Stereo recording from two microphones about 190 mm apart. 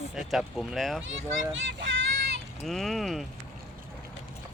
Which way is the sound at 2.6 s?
Centre (ahead or behind).